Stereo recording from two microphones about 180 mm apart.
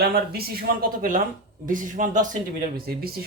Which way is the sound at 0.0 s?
60° right (ahead or behind).